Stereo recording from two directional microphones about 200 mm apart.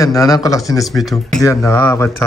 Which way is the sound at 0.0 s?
15° left (ahead or behind).